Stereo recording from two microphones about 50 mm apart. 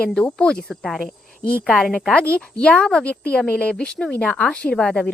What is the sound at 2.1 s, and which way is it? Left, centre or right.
A woman's voice, left.